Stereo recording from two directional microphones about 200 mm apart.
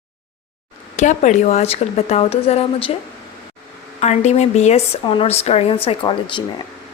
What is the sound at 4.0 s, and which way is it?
A woman's voice, 35° left (ahead or behind).